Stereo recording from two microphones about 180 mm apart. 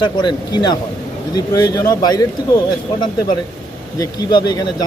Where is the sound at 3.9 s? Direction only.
25° left (ahead or behind).